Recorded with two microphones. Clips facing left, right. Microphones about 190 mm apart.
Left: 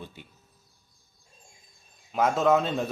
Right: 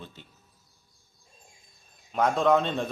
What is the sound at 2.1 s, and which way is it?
Speech, 5° left (ahead or behind).